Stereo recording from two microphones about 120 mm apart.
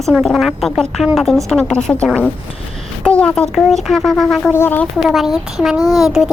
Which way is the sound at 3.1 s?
10° left (ahead or behind).